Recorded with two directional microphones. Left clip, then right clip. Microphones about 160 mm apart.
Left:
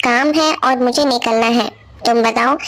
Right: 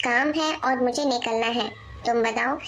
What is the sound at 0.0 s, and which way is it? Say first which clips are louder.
Speech: left 9 dB; 40° left (ahead or behind).